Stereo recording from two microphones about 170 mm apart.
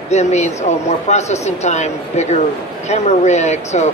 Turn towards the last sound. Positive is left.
turn(degrees=40)  # may be behind; listen again after turning